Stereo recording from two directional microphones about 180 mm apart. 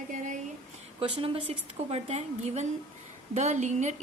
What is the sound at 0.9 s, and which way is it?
A woman's voice, 30° right (ahead or behind).